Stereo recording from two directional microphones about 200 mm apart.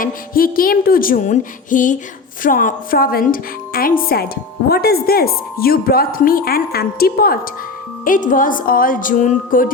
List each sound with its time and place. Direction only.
0.0 s speech: 45° left (ahead or behind)